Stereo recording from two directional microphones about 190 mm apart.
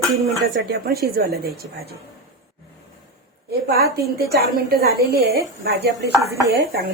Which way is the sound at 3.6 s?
55° right (ahead or behind).